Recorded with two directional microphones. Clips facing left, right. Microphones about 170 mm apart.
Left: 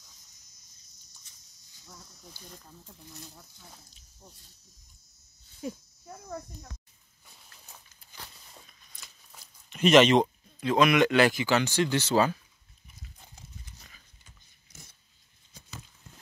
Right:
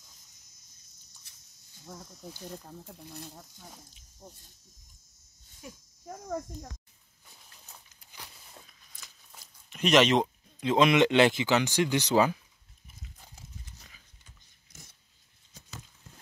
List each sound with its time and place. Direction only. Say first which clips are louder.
2.9 s speech: right 2 dB; 60° right (ahead or behind)
6.0 s speech: right 5 dB; 45° right (ahead or behind)
8.5 s a sound: right 1 dB; centre (ahead or behind)
10.6 s speech: even; 25° right (ahead or behind)